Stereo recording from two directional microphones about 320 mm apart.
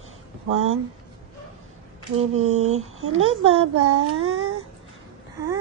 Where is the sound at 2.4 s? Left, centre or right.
Right.